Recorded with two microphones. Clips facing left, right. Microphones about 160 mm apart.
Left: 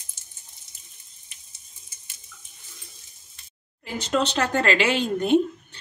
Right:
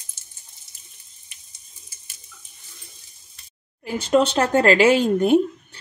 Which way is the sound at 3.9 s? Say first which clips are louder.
Right 6 dB; 55° right (ahead or behind).